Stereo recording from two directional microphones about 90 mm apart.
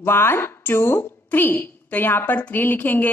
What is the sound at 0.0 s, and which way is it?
A woman's voice, 25° left (ahead or behind).